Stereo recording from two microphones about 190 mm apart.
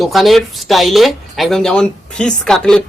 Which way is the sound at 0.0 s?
Centre (ahead or behind).